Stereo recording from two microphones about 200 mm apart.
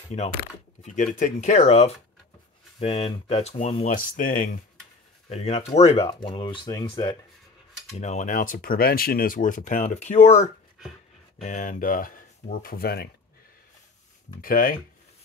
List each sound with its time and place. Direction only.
0.8 s speech: 40° left (ahead or behind)
5.3 s speech: 30° left (ahead or behind)
8.0 s speech: 35° left (ahead or behind); by 13.1 s 50° left (ahead or behind)
14.4 s speech: 45° left (ahead or behind)